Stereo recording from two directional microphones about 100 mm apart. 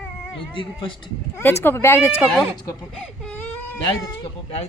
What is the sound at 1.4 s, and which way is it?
Speech, 25° left (ahead or behind).